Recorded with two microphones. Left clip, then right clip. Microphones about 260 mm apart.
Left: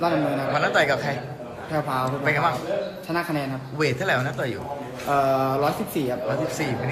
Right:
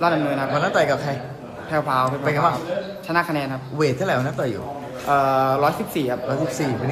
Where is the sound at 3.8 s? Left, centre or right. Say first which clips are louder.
Right 2 dB; centre.